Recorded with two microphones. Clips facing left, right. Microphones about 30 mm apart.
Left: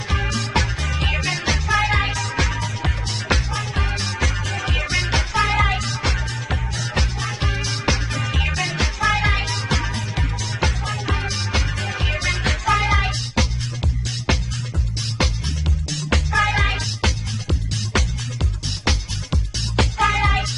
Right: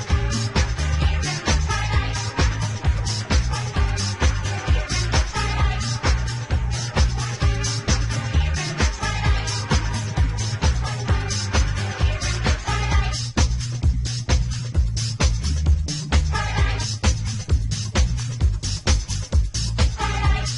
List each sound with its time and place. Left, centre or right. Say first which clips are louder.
0.1 s music: left 4 dB; left
3.1 s music: left 4 dB; left
4.0 s music: left 2 dB; left
9.7 s music: left 2 dB; left
11.1 s music: left 2 dB; left
12.1 s music: left 6 dB; left
12.8 s music: left 6 dB; left
15.9 s music: left 6 dB; left
18.9 s music: left 3 dB; left
19.8 s music: left 8 dB; left